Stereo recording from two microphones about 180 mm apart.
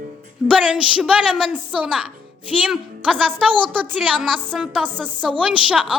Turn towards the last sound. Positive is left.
turn(degrees=-5)  # may be behind; listen again after turning